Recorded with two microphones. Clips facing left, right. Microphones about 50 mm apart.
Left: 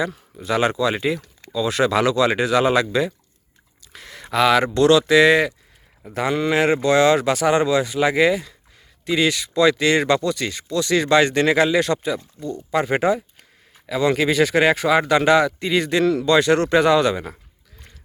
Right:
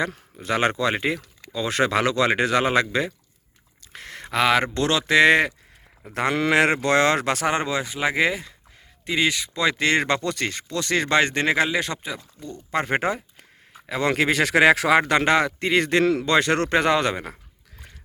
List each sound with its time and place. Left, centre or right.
0.3 s speech: right
0.9 s speech: right
3.9 s a sound: right
4.2 s speech: right
6.4 s speech: right
12.7 s speech: right
14.9 s speech: right